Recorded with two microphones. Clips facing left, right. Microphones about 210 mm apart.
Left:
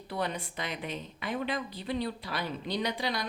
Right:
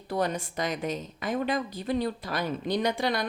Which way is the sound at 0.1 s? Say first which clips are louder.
Right 5 dB; 45° right (ahead or behind).